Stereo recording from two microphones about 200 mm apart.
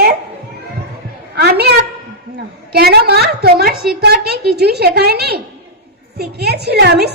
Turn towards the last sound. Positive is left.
turn(degrees=-55)  # may be behind; listen again after turning